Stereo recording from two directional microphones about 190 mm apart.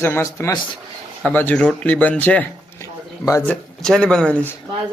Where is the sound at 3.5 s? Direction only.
5° left (ahead or behind).